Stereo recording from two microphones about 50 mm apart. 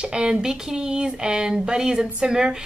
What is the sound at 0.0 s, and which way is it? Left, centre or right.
A woman's voice, centre.